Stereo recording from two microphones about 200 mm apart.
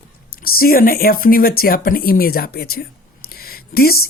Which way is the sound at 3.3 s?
50° left (ahead or behind).